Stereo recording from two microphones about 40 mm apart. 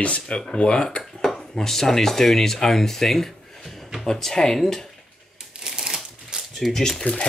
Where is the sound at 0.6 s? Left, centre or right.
Left.